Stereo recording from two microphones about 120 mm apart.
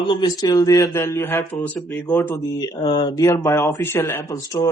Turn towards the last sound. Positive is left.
turn(degrees=25)  # may be behind; listen again after turning